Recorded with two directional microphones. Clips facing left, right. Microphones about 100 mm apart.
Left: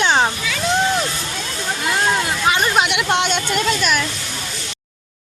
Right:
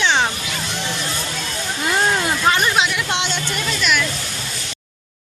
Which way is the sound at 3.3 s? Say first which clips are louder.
Left 5 dB; 20° left (ahead or behind).